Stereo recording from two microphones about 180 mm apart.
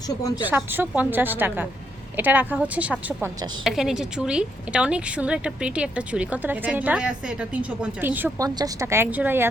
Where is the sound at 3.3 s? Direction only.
25° right (ahead or behind).